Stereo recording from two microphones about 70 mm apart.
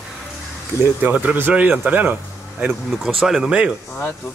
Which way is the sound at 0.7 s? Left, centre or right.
Left.